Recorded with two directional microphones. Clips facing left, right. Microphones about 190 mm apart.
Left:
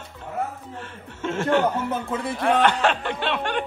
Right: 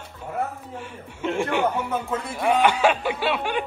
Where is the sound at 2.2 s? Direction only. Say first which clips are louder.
Left 1 dB; 10° right (ahead or behind).